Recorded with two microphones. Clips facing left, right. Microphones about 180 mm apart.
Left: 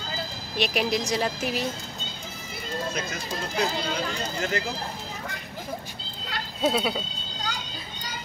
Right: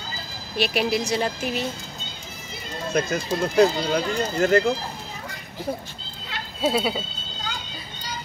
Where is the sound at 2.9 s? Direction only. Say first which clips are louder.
Right 8 dB; 55° right (ahead or behind).